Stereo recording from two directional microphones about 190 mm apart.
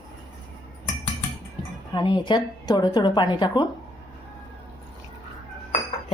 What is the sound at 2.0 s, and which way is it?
A woman's voice, 25° left (ahead or behind).